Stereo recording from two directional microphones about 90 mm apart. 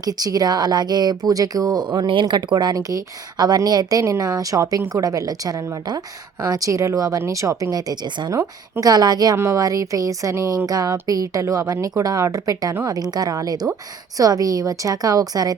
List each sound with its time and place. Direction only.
0.0 s speech: 45° right (ahead or behind)
4.0 s a woman's voice: 35° right (ahead or behind)
8.3 s a woman's voice: 30° right (ahead or behind)
8.8 s speech: 45° right (ahead or behind)
9.3 s a woman's voice: 35° right (ahead or behind)